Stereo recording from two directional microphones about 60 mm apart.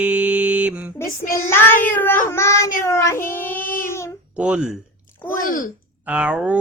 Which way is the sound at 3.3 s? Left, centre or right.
Left.